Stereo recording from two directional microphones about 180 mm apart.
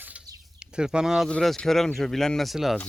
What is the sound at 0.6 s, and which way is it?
Speech, 5° right (ahead or behind).